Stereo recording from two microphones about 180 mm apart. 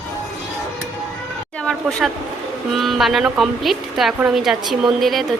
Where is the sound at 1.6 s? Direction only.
5° left (ahead or behind).